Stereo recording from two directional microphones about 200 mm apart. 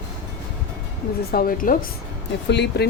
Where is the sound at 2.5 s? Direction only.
55° left (ahead or behind).